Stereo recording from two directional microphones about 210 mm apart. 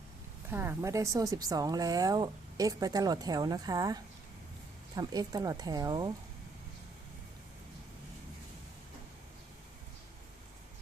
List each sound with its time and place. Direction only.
0.5 s a woman's voice: 10° right (ahead or behind)